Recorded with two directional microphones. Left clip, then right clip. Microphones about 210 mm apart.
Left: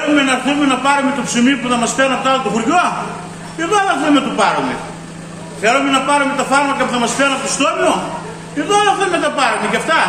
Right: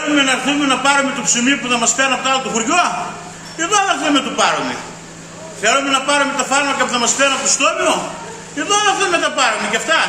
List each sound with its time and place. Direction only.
0.2 s a man's voice: 5° right (ahead or behind)
5.6 s a man's voice: 10° right (ahead or behind)